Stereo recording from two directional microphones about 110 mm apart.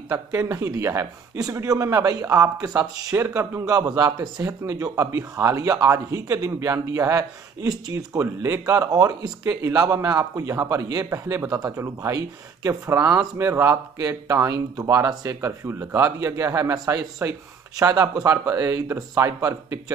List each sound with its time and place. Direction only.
0.1 s a man's voice: 30° right (ahead or behind)